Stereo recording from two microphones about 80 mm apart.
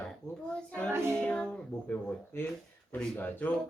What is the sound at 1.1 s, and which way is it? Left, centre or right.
Child singing, centre.